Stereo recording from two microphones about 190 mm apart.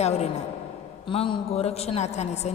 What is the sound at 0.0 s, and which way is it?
A woman's voice, 35° left (ahead or behind).